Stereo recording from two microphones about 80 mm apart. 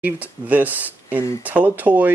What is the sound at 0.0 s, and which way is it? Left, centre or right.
Speech, right.